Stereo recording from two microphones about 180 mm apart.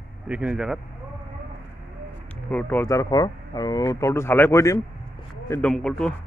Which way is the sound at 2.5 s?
10° left (ahead or behind).